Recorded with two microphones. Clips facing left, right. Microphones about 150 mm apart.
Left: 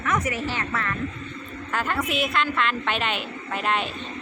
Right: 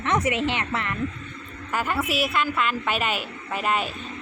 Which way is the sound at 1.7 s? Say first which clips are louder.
Right 1 dB; 5° right (ahead or behind).